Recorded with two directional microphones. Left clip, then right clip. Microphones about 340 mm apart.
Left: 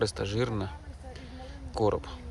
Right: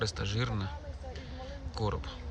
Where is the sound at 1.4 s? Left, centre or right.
Centre.